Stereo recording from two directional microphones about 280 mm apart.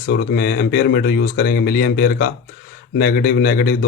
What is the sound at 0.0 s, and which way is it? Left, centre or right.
Speech, left.